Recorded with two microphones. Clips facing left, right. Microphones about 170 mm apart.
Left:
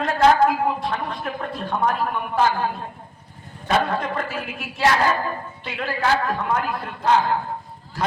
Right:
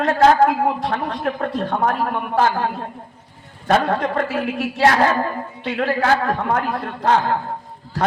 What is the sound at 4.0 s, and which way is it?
A man's voice, 65° right (ahead or behind).